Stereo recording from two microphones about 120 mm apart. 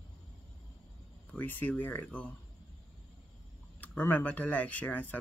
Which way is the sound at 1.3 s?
15° left (ahead or behind).